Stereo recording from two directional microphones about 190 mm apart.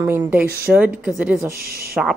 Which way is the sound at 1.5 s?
55° right (ahead or behind).